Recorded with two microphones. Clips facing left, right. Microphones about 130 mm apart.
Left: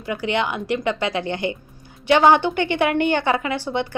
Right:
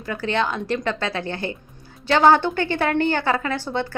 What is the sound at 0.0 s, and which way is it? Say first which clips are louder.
A woman's voice: left 1 dB; 15° left (ahead or behind).